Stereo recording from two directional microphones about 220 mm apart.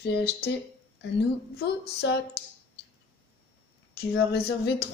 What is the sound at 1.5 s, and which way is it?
Speech, 50° left (ahead or behind).